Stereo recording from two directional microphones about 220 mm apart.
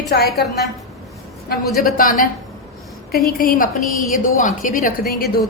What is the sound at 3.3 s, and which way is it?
A woman's voice, 40° left (ahead or behind).